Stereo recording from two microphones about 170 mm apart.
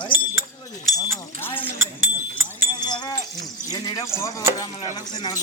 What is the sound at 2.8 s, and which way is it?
Sheep, 25° left (ahead or behind).